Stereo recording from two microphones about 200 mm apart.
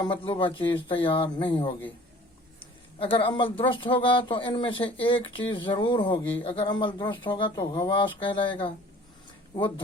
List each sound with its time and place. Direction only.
0.0 s speech: 25° left (ahead or behind)
3.0 s speech: 25° left (ahead or behind)